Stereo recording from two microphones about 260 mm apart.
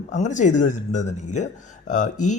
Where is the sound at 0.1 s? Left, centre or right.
Left.